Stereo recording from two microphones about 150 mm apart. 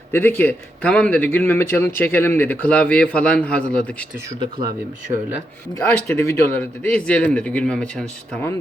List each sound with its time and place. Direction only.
0.1 s a man's voice: 15° left (ahead or behind)
5.1 s speech: 25° right (ahead or behind)
5.8 s a man's voice: 15° left (ahead or behind)